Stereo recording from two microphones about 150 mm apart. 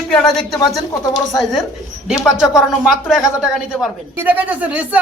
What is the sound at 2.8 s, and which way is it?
Speech, 5° right (ahead or behind).